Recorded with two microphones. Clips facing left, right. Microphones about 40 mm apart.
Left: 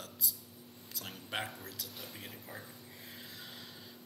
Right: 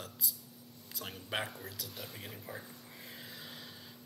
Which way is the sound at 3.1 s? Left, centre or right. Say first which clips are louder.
Right 1 dB; centre.